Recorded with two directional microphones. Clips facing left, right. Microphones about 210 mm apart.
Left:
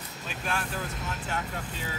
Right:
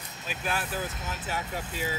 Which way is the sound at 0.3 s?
5° right (ahead or behind).